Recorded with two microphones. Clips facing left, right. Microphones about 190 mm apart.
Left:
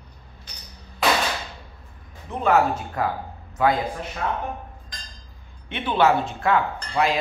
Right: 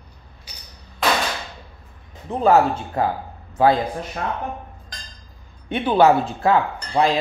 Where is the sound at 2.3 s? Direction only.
35° right (ahead or behind).